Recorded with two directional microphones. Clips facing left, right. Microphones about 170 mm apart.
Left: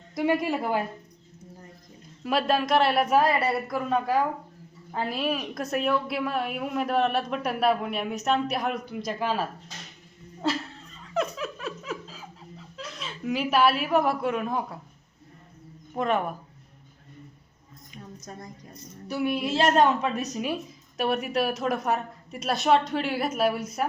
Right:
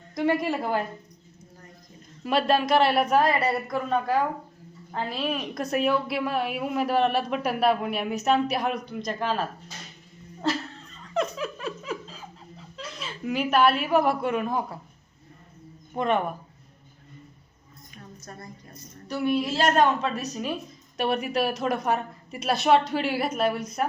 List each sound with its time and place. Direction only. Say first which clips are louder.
0.1 s a woman's voice: even; 10° left (ahead or behind)
2.2 s a woman's voice: right 2 dB; centre (ahead or behind)
11.0 s a sound: right 1 dB; 5° left (ahead or behind)
16.0 s a woman's voice: right 1 dB; centre (ahead or behind)
17.9 s tambourine: left 2 dB; 15° left (ahead or behind)
19.0 s a woman's voice: right 2 dB; 10° left (ahead or behind)
20.9 s a woman's voice: even; centre (ahead or behind)